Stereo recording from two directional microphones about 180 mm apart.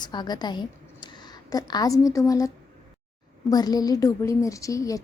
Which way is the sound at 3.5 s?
20° left (ahead or behind).